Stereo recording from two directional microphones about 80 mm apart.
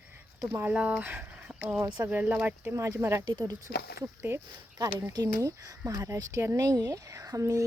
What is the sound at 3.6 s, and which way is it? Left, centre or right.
Speech, right.